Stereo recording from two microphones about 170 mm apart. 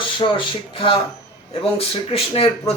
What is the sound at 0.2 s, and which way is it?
A man's voice, 30° left (ahead or behind).